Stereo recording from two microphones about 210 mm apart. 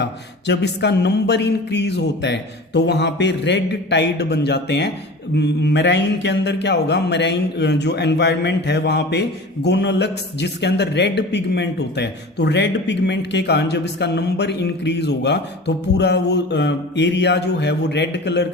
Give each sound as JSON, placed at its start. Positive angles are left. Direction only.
{"t": 0.0, "sound": "a man's voice", "side_deg": 55}